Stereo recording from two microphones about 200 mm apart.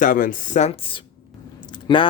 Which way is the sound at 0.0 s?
45° left (ahead or behind).